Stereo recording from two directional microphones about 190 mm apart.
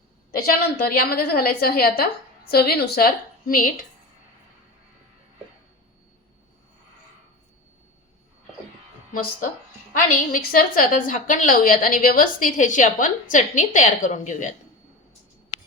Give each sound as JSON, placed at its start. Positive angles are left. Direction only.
{"t": 0.3, "sound": "a woman's voice", "side_deg": 55}
{"t": 9.9, "sound": "a woman's voice", "side_deg": 45}